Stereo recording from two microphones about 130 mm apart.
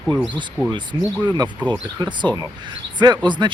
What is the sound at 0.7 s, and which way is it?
Speech, 35° right (ahead or behind).